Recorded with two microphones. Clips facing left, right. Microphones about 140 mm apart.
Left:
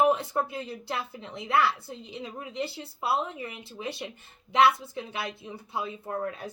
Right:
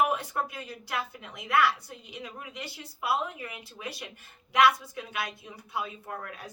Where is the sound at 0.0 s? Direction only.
25° left (ahead or behind).